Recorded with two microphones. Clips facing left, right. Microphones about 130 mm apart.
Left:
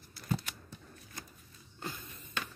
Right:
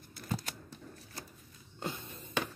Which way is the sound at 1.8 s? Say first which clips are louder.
Right 4 dB; 25° right (ahead or behind).